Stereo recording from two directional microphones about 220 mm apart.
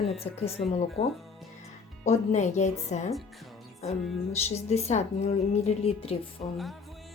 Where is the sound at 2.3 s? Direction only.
30° left (ahead or behind).